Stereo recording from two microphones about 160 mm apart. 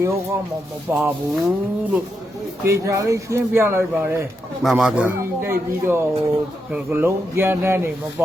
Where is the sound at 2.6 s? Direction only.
20° right (ahead or behind).